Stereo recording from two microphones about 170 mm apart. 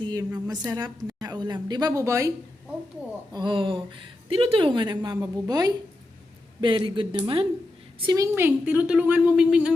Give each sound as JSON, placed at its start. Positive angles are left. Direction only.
{"t": 0.0, "sound": "a woman's voice", "side_deg": -25}
{"t": 3.3, "sound": "a woman's voice", "side_deg": -30}